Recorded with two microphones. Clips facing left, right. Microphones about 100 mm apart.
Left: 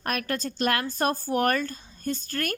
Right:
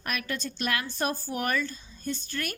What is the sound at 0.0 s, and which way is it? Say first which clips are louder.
Speech: left 4 dB; 45° left (ahead or behind).